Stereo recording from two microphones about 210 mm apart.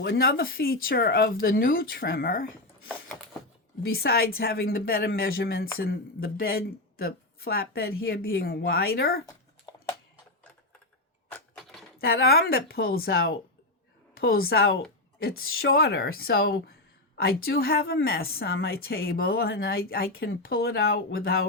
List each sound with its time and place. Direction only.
0.0 s a woman's voice: 50° left (ahead or behind)
3.8 s a woman's voice: 45° left (ahead or behind)
11.3 s a sound: 5° left (ahead or behind)
11.9 s a woman's voice: 45° left (ahead or behind)